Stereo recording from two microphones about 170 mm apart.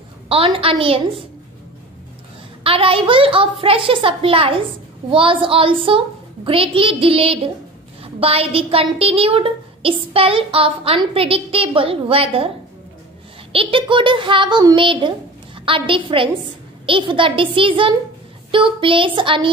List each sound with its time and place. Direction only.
0.3 s a woman's voice: 35° right (ahead or behind)
2.6 s a woman's voice: 35° right (ahead or behind)